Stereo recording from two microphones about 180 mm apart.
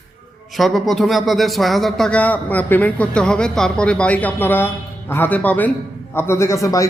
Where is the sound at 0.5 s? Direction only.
Centre (ahead or behind).